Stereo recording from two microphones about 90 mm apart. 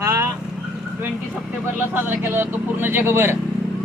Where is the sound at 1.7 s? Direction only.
20° right (ahead or behind).